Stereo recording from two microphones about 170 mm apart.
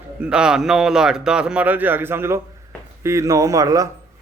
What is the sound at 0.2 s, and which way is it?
A man's voice, 5° right (ahead or behind).